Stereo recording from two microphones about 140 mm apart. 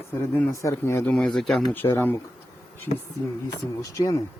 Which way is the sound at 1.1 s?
5° left (ahead or behind).